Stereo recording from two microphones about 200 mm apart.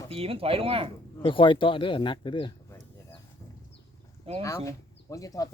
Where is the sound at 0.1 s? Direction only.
30° right (ahead or behind).